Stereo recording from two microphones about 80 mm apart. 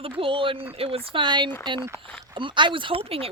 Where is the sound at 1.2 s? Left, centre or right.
Right.